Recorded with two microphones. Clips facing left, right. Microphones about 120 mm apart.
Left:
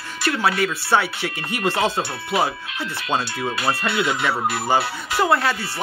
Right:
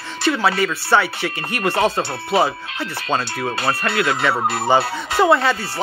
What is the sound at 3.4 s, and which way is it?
Speech, 35° right (ahead or behind).